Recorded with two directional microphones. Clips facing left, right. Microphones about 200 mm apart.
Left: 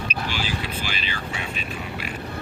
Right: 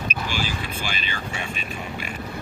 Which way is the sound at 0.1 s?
45° right (ahead or behind).